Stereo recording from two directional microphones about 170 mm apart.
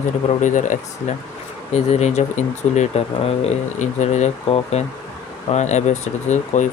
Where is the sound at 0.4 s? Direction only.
45° left (ahead or behind).